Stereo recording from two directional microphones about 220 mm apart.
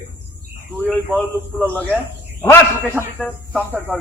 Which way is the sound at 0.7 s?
10° right (ahead or behind).